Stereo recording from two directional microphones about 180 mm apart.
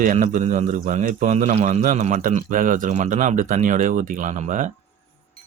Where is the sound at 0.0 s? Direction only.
45° right (ahead or behind).